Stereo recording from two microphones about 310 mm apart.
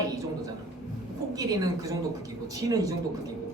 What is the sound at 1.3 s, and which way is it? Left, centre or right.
A woman's voice, centre.